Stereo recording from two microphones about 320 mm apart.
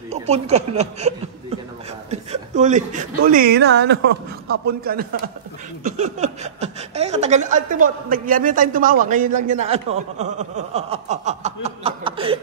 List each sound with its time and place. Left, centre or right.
0.1 s a woman's voice: centre